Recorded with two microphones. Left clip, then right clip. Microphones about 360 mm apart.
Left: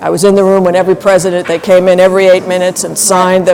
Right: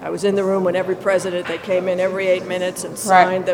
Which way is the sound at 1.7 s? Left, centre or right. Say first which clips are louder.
Left 13 dB; left.